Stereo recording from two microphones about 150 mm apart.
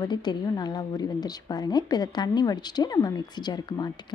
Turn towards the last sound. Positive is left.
turn(degrees=30)  # may be behind; listen again after turning